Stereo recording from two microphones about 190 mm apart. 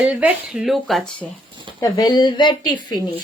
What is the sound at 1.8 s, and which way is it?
Speech, 20° left (ahead or behind).